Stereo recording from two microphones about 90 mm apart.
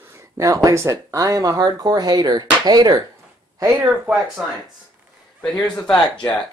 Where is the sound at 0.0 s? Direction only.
35° right (ahead or behind).